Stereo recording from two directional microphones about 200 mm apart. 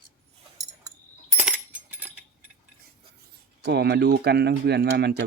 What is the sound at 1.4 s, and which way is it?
Coin, 10° right (ahead or behind).